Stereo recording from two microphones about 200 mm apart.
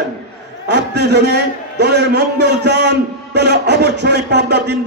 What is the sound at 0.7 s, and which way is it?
A man's voice, 60° right (ahead or behind).